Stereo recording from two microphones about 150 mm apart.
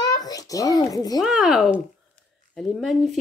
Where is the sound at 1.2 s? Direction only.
Centre (ahead or behind).